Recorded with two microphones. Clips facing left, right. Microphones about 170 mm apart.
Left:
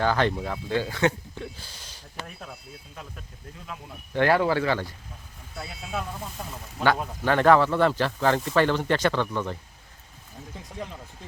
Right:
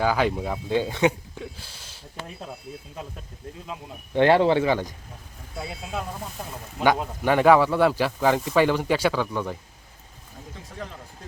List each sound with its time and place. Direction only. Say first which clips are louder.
0.0 s speech: right 1 dB; 10° right (ahead or behind)
1.4 s speech: even; 5° right (ahead or behind)
3.7 s speech: right 2 dB; 25° right (ahead or behind)